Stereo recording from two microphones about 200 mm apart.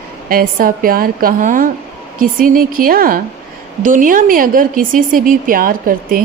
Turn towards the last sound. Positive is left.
turn(degrees=-45)  # may be behind; listen again after turning